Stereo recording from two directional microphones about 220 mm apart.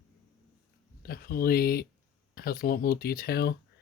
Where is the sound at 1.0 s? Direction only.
45° left (ahead or behind).